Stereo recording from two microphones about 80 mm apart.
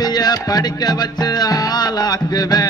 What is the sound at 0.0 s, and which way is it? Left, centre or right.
Music, left.